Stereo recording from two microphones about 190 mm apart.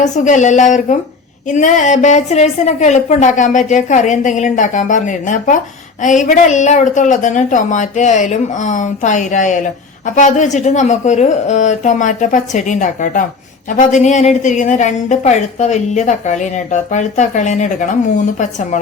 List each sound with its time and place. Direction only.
0.0 s speech: 40° left (ahead or behind)